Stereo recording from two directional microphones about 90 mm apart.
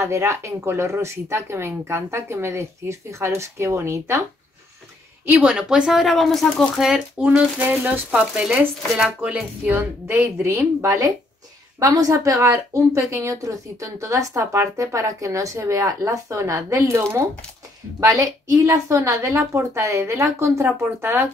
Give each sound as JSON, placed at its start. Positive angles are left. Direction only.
{"t": 0.0, "sound": "a woman's voice", "side_deg": -30}
{"t": 5.4, "sound": "speech", "side_deg": -10}
{"t": 9.7, "sound": "a woman's voice", "side_deg": -25}